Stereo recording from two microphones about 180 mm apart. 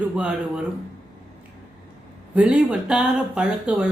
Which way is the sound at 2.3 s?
5° right (ahead or behind).